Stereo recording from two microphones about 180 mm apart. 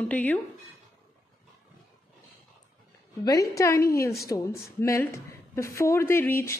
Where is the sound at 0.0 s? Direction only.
10° left (ahead or behind).